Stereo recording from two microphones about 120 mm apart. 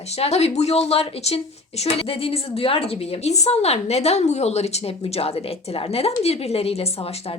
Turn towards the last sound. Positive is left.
turn(degrees=55)  # may be behind; listen again after turning